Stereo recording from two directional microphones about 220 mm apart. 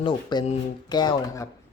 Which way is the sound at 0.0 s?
20° left (ahead or behind).